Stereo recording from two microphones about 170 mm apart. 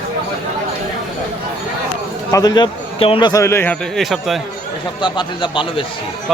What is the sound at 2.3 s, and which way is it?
A man's voice, 20° left (ahead or behind).